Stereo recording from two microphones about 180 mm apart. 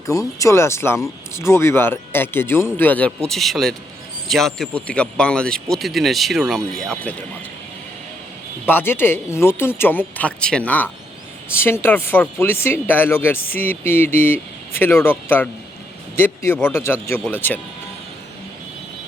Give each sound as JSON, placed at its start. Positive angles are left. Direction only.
{"t": 0.0, "sound": "speech", "side_deg": 20}
{"t": 8.6, "sound": "speech", "side_deg": 10}